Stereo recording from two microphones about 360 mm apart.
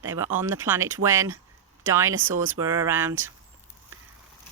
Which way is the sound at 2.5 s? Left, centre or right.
Centre.